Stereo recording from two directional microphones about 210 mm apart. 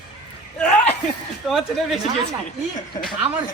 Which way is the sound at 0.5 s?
5° left (ahead or behind).